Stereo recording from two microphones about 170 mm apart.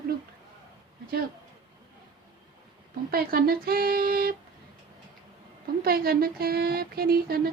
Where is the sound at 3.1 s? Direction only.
65° right (ahead or behind).